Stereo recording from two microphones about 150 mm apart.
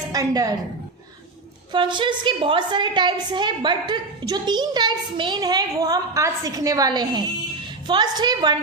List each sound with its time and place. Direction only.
0.1 s a woman's voice: 25° right (ahead or behind)
1.7 s a woman's voice: 30° right (ahead or behind)